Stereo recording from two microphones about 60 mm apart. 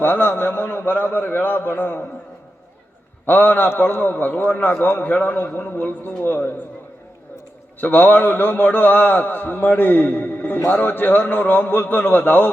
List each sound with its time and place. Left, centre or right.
0.0 s a man's voice: left
3.2 s a man's voice: left
7.8 s a man's voice: left